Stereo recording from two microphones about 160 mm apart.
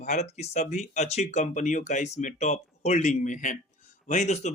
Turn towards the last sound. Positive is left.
turn(degrees=45)  # may be behind; listen again after turning